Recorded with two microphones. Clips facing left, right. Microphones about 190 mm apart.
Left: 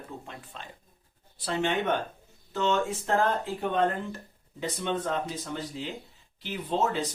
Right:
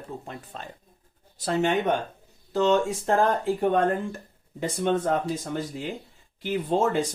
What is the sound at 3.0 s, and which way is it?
Speech, 50° right (ahead or behind).